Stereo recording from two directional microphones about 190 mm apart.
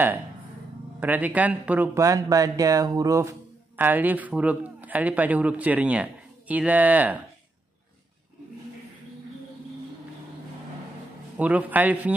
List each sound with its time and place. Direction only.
0.9 s speech: 10° right (ahead or behind)
11.3 s speech: 10° right (ahead or behind)